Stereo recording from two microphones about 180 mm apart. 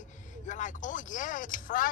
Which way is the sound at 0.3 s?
45° left (ahead or behind).